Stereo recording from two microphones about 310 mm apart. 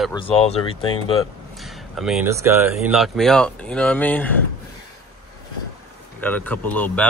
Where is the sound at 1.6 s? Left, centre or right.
Centre.